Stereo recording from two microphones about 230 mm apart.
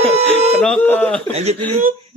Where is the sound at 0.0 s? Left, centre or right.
Right.